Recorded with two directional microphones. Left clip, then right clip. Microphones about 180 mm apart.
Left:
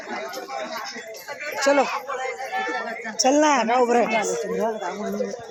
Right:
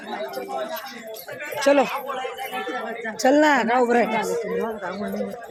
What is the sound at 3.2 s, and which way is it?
Speech, 20° right (ahead or behind).